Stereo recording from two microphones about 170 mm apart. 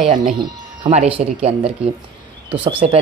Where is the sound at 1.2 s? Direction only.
45° right (ahead or behind).